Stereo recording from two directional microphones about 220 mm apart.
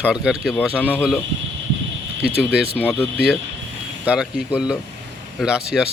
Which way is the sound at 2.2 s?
5° right (ahead or behind).